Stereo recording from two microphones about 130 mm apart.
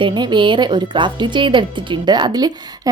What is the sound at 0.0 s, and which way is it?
A woman's voice, 35° right (ahead or behind).